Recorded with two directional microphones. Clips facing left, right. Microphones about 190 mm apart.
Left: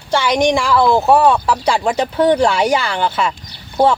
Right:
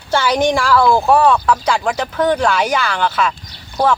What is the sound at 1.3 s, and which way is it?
Speech, 25° left (ahead or behind).